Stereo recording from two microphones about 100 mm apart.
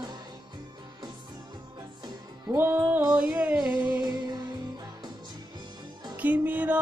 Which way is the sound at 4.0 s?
40° right (ahead or behind).